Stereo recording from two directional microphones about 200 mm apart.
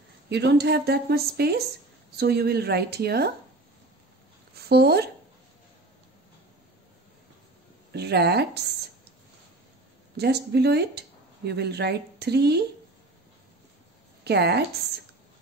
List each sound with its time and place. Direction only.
0.3 s a woman's voice: 55° right (ahead or behind)
4.6 s a woman's voice: 50° right (ahead or behind)
7.9 s speech: 55° right (ahead or behind)
10.1 s speech: 55° right (ahead or behind)
14.2 s speech: 55° right (ahead or behind)